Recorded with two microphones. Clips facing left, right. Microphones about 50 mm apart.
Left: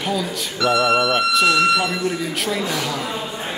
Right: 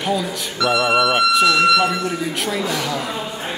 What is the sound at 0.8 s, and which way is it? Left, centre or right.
Speech, right.